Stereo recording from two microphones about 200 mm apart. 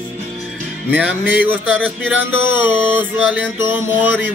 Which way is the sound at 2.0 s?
75° left (ahead or behind).